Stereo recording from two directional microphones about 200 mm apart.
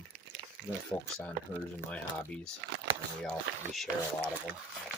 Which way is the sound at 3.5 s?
50° right (ahead or behind).